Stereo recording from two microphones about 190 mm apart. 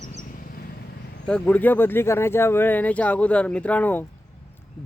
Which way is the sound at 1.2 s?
5° left (ahead or behind).